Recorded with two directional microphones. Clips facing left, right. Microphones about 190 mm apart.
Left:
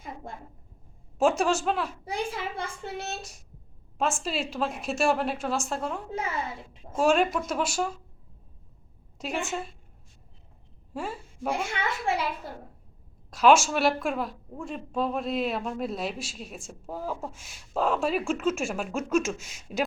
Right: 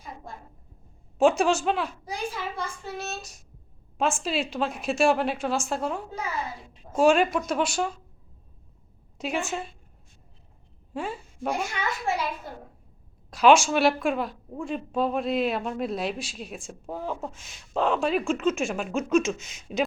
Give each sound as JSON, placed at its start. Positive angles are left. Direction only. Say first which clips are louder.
{"t": 1.2, "sound": "a woman's voice", "louder": "right 3 dB", "side_deg": 0}
{"t": 2.0, "sound": "a child's voice", "louder": "left 1 dB", "side_deg": 25}
{"t": 3.9, "sound": "a woman's voice", "louder": "right 2 dB", "side_deg": 0}
{"t": 7.0, "sound": "a woman's voice", "louder": "right 3 dB", "side_deg": 0}
{"t": 9.1, "sound": "a woman's voice", "louder": "right 2 dB", "side_deg": 0}
{"t": 10.9, "sound": "a sound", "louder": "right 2 dB", "side_deg": 0}
{"t": 11.5, "sound": "a child's voice", "louder": "left 1 dB", "side_deg": 30}
{"t": 13.3, "sound": "a woman's voice", "louder": "right 2 dB", "side_deg": 0}